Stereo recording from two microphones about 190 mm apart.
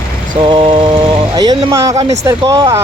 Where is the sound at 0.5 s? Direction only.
30° right (ahead or behind).